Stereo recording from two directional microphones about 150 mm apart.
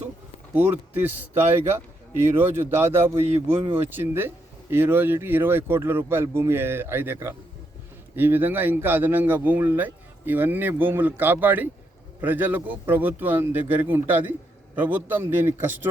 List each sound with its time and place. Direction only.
0.5 s speech: 10° right (ahead or behind)
3.2 s speech: 40° right (ahead or behind)
3.8 s speech: 15° right (ahead or behind)